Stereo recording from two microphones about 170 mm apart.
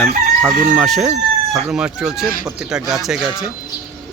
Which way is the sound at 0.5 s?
55° right (ahead or behind).